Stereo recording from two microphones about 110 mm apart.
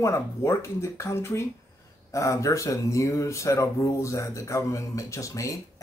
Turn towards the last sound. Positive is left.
turn(degrees=30)  # may be behind; listen again after turning